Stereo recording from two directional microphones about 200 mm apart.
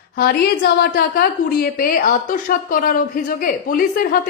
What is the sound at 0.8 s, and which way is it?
A woman's voice, 50° left (ahead or behind).